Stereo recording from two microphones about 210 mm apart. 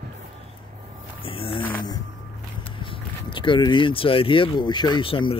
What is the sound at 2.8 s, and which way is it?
Speech, 25° left (ahead or behind).